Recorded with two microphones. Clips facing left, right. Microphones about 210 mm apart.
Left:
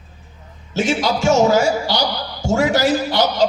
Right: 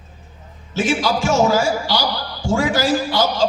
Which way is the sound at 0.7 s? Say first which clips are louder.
Even; 20° left (ahead or behind).